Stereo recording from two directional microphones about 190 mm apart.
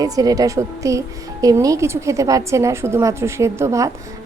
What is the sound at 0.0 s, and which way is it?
Speech, 20° right (ahead or behind).